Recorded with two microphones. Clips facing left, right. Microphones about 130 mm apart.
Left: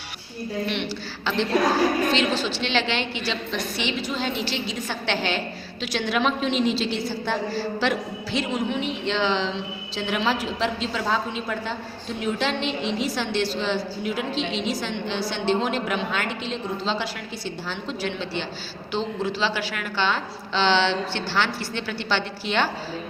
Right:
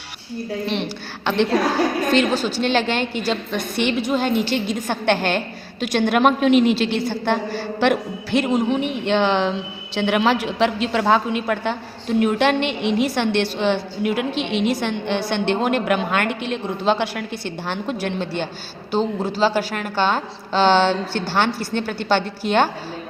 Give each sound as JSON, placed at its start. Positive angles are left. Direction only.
{"t": 1.2, "sound": "a woman's voice", "side_deg": -60}
{"t": 2.1, "sound": "a woman's voice", "side_deg": -45}